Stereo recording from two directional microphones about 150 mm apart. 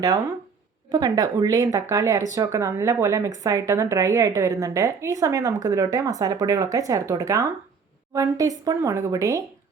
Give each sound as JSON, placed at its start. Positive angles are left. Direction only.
{"t": 0.9, "sound": "speech", "side_deg": -25}